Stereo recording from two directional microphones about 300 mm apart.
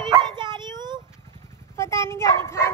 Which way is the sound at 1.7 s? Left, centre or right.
Centre.